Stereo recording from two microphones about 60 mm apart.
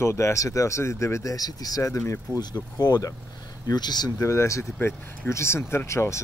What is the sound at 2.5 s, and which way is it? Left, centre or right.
Speech, left.